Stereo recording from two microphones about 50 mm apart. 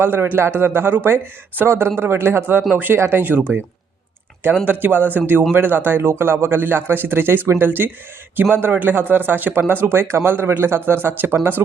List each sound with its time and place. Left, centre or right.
0.0 s speech: right
2.0 s speech: right
4.6 s speech: right
8.7 s speech: right
9.8 s speech: right